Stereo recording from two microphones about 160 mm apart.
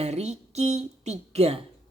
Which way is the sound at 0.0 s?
45° right (ahead or behind).